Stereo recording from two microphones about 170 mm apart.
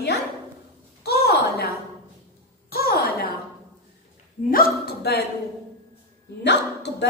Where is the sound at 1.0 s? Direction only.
65° left (ahead or behind).